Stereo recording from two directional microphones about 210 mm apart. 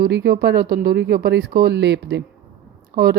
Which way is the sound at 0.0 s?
50° right (ahead or behind).